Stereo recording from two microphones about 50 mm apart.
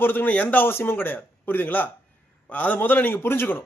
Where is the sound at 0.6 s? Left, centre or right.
Left.